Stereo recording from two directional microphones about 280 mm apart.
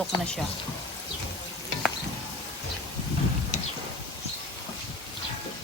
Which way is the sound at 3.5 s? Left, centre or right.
Left.